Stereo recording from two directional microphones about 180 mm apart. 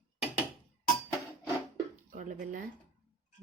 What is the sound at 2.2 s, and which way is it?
Speech, 45° right (ahead or behind).